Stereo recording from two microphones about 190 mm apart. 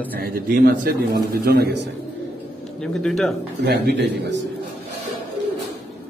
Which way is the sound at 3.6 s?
65° right (ahead or behind).